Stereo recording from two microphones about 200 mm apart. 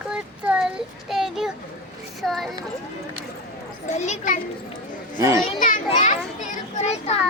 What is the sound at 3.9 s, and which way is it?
Speech, 35° left (ahead or behind).